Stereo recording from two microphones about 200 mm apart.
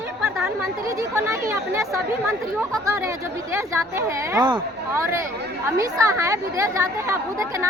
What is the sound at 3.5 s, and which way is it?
Speech, 15° right (ahead or behind).